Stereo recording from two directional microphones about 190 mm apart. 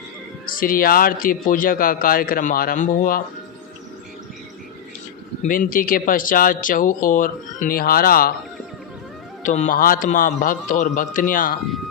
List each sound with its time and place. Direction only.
0.6 s speech: 50° left (ahead or behind)
5.4 s speech: 45° left (ahead or behind)
9.4 s speech: 40° left (ahead or behind)